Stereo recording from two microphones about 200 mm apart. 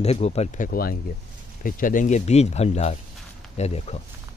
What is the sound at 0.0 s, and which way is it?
Speech, 30° left (ahead or behind).